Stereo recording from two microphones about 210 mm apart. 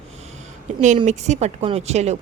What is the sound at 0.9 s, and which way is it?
A woman's voice, 35° right (ahead or behind).